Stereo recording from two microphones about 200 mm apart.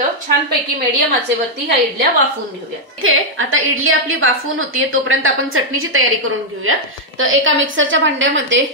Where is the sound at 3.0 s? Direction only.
90° right.